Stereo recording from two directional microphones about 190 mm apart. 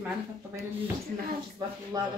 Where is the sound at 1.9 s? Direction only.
20° right (ahead or behind).